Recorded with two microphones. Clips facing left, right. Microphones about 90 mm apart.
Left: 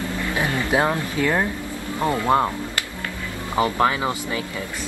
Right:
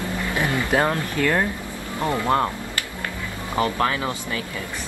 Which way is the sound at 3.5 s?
20° left (ahead or behind).